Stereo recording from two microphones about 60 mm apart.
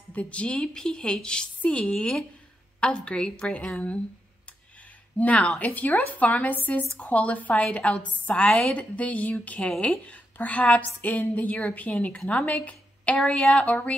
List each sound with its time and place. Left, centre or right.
0.1 s a woman's voice: left
5.2 s a woman's voice: left